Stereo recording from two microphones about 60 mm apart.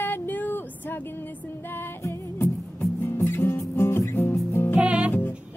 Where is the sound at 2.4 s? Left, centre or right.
Left.